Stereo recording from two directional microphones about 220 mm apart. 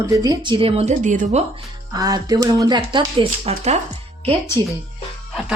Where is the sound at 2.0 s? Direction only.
15° right (ahead or behind).